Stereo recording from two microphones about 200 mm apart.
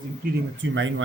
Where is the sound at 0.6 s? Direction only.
70° right (ahead or behind).